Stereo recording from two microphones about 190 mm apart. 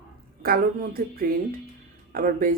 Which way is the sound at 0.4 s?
50° right (ahead or behind).